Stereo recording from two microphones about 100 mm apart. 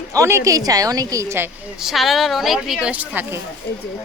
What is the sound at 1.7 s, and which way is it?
Speech, centre (ahead or behind).